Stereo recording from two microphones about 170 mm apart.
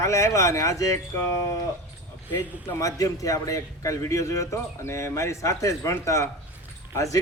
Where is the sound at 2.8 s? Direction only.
20° left (ahead or behind).